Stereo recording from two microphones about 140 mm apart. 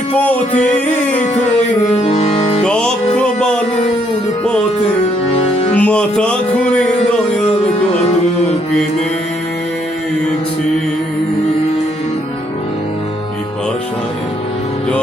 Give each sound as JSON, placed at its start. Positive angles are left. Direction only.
{"t": 2.0, "sound": "music", "side_deg": 45}
{"t": 2.6, "sound": "music", "side_deg": 5}
{"t": 5.3, "sound": "music", "side_deg": 45}
{"t": 5.7, "sound": "music", "side_deg": 10}